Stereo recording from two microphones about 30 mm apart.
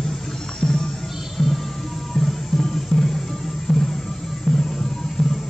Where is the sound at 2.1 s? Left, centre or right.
Centre.